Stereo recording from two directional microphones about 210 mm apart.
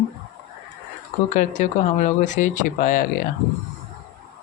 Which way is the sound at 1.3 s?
40° left (ahead or behind).